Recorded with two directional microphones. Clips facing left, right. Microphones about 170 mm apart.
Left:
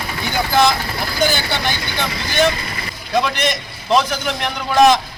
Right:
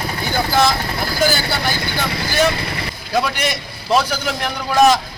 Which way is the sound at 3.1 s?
5° right (ahead or behind).